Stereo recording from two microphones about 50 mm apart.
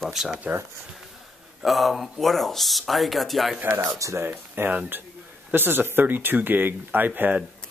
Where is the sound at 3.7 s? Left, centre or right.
Right.